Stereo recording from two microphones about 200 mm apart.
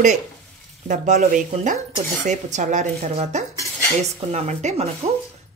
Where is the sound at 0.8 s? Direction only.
40° right (ahead or behind).